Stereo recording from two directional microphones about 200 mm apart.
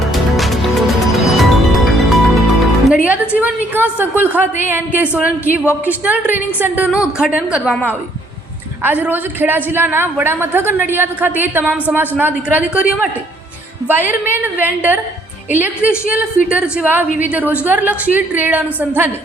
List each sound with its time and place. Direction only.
0.0 s music: centre (ahead or behind)
2.9 s a sound: 10° right (ahead or behind)
4.2 s a woman's voice: 10° right (ahead or behind)